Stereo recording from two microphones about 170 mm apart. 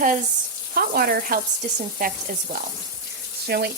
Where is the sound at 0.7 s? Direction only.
60° right (ahead or behind).